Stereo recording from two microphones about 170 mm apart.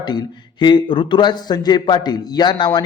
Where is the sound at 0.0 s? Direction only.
25° left (ahead or behind).